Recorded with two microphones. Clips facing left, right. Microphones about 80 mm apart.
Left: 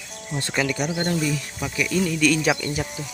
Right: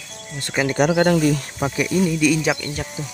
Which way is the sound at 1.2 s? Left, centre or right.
Right.